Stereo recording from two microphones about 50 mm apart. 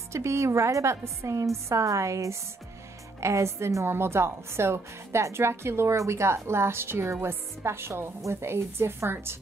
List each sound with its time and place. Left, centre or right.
0.1 s a woman's voice: right
3.2 s a woman's voice: right